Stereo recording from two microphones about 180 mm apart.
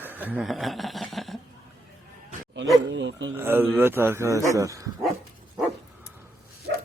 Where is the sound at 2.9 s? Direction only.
90° right.